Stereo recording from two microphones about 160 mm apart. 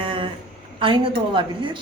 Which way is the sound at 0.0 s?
30° right (ahead or behind).